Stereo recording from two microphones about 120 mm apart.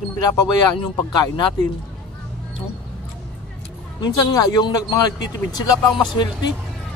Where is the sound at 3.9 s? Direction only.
40° left (ahead or behind).